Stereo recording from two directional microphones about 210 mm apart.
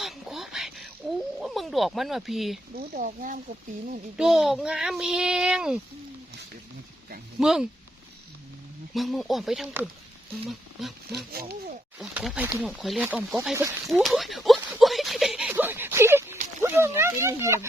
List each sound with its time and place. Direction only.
0.0 s a sound: centre (ahead or behind)
1.4 s speech: centre (ahead or behind)
2.7 s speech: 40° right (ahead or behind)
4.2 s a child's voice: centre (ahead or behind)
7.3 s a child's voice: centre (ahead or behind)
9.0 s a child's voice: centre (ahead or behind)
11.3 s speech: 45° right (ahead or behind)
11.9 s a child's voice: 5° right (ahead or behind)
13.8 s a sound: centre (ahead or behind)
16.6 s speech: 10° right (ahead or behind)